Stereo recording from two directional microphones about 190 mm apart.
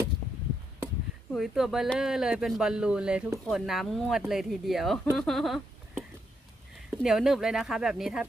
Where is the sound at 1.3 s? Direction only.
Centre (ahead or behind).